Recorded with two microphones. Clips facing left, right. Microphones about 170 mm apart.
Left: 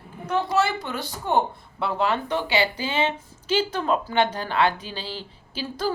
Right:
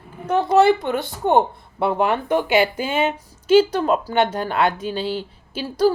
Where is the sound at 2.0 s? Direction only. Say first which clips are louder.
Right 4 dB; 15° right (ahead or behind).